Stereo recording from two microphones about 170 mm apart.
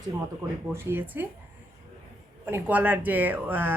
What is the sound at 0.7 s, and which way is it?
Speech, 10° right (ahead or behind).